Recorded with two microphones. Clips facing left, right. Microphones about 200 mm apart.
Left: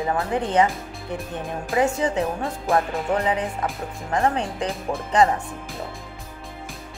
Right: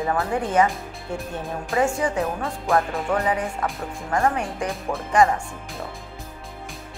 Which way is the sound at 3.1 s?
20° left (ahead or behind).